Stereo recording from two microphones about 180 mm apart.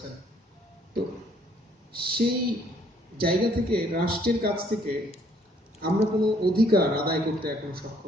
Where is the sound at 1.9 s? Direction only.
60° right (ahead or behind).